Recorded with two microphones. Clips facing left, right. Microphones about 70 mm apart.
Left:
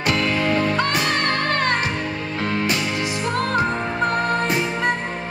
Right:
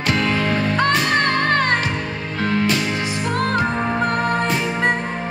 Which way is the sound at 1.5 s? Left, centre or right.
Right.